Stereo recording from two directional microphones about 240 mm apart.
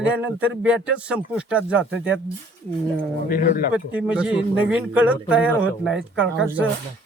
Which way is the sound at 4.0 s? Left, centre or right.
Centre.